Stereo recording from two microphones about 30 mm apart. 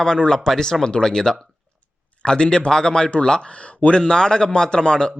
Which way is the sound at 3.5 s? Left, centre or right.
Left.